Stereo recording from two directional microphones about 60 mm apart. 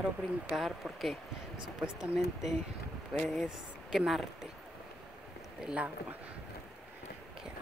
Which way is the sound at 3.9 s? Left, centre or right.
Centre.